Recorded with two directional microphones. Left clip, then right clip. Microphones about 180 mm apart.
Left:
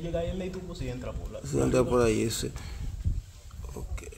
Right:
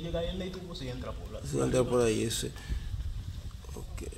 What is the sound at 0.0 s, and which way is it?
A man's voice, 40° left (ahead or behind).